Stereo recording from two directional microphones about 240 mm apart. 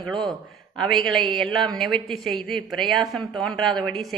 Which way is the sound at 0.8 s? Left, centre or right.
Centre.